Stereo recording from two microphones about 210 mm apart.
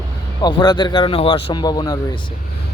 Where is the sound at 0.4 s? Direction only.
20° left (ahead or behind).